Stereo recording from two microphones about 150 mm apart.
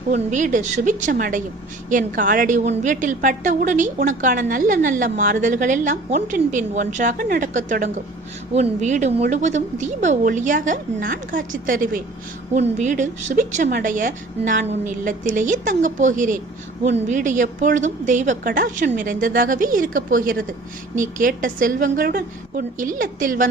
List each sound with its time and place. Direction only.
0.1 s a woman's voice: 55° right (ahead or behind)
12.5 s a woman's voice: 50° right (ahead or behind)